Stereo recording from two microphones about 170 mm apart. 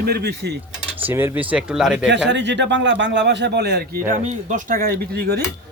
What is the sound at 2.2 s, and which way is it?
Speech, 90° right.